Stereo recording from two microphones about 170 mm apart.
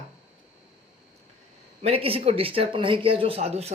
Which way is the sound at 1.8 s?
35° right (ahead or behind).